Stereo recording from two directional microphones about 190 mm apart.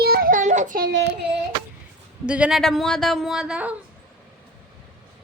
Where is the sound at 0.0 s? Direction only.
55° right (ahead or behind).